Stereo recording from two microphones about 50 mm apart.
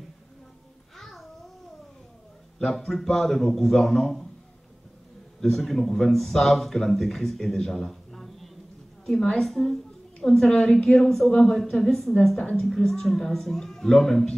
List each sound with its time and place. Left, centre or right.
0.9 s babbling: centre
2.6 s a woman's voice: centre
5.4 s a woman's voice: centre
11.7 s a woman's voice: centre